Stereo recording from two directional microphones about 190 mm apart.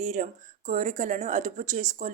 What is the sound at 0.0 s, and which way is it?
Speech, 40° right (ahead or behind).